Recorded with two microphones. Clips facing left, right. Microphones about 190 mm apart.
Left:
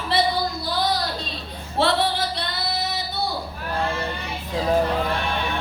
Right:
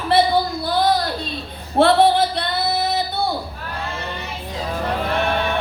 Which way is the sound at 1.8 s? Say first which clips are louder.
Right 8 dB; 55° right (ahead or behind).